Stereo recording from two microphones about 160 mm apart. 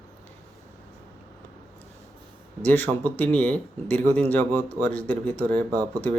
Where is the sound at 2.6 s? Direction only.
10° left (ahead or behind).